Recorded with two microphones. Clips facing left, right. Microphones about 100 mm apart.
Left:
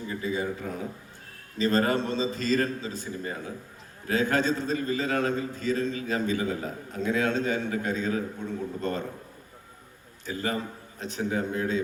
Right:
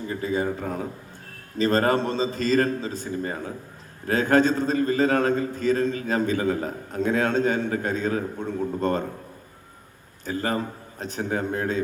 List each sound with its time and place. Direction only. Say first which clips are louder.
0.1 s a man's voice: right 4 dB; 45° right (ahead or behind)
10.2 s a man's voice: right 4 dB; 45° right (ahead or behind)